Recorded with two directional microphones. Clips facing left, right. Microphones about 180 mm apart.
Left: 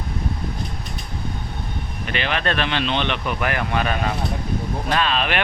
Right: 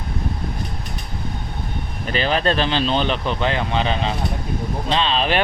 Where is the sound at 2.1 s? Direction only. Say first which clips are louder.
Right 4 dB; 35° right (ahead or behind).